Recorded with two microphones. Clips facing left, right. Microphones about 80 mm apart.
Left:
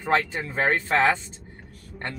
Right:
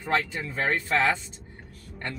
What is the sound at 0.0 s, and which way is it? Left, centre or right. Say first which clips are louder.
Speech: left 3 dB; left.